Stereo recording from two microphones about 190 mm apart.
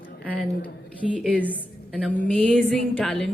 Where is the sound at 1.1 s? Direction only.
5° left (ahead or behind).